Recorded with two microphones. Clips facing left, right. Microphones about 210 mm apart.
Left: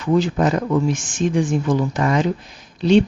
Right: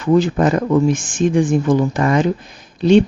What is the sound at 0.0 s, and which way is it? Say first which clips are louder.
Speech: right 3 dB; 50° right (ahead or behind).